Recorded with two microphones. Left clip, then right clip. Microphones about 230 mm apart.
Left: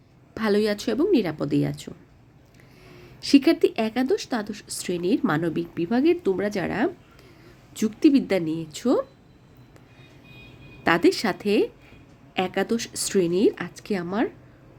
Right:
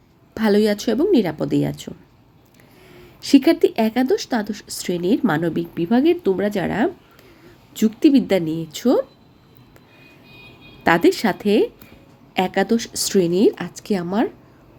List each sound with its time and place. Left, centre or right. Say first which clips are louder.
0.3 s speech: right 5 dB; centre
2.9 s speech: right 4 dB; centre
10.8 s speech: right 4 dB; centre